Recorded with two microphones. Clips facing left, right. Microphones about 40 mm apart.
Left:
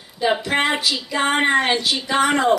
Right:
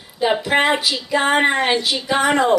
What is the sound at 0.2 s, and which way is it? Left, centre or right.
Speech, centre.